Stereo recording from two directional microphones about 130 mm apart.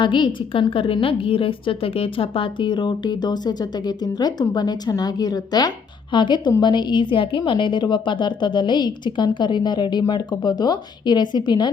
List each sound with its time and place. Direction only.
0.0 s a woman's voice: 40° left (ahead or behind)